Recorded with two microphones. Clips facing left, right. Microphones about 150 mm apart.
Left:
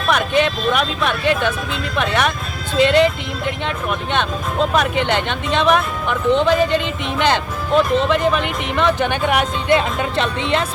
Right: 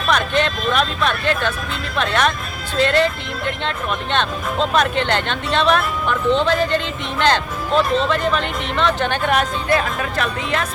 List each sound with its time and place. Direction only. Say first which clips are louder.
0.1 s speech: left 2 dB; 10° left (ahead or behind); by 10.7 s 25° left (ahead or behind)